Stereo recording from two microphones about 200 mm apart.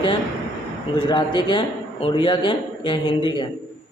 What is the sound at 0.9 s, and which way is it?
A man's voice, 25° left (ahead or behind).